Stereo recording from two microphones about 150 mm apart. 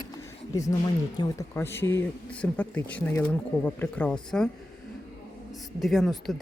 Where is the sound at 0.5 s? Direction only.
20° left (ahead or behind); by 4.4 s 5° left (ahead or behind).